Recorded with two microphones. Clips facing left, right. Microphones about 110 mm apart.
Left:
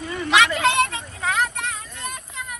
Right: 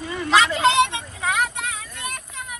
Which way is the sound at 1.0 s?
5° right (ahead or behind).